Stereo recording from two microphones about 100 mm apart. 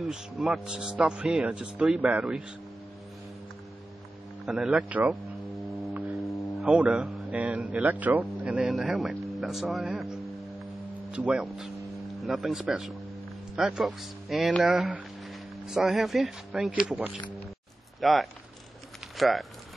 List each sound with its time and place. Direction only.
0.1 s speech: 5° right (ahead or behind)
4.5 s speech: 10° right (ahead or behind)
6.2 s a sound: 30° left (ahead or behind)
6.7 s speech: 10° right (ahead or behind)
11.1 s speech: 10° right (ahead or behind)
16.8 s speech: 15° right (ahead or behind)
18.0 s speech: centre (ahead or behind)